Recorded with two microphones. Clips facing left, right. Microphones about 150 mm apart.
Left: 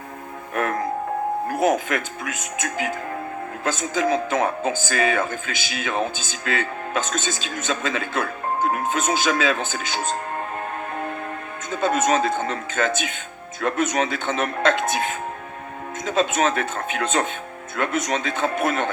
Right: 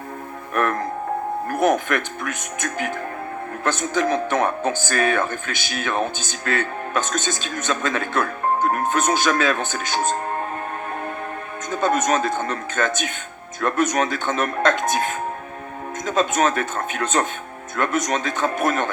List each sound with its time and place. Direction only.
0.5 s music: 55° right (ahead or behind)
3.6 s speech: 60° right (ahead or behind)
11.7 s speech: 50° right (ahead or behind)